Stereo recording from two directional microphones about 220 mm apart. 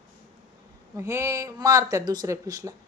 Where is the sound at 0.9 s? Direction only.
15° right (ahead or behind).